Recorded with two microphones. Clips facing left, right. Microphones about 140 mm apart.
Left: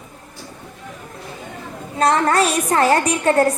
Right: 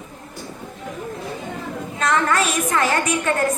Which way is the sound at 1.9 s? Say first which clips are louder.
Left 4 dB; 35° left (ahead or behind).